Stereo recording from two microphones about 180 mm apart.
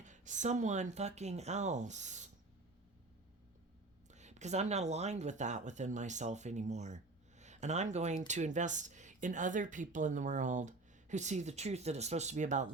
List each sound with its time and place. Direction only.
0.0 s speech: 40° right (ahead or behind)
4.1 s speech: 40° right (ahead or behind)